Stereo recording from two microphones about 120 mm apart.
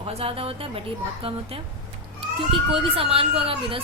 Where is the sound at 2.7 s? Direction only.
55° right (ahead or behind).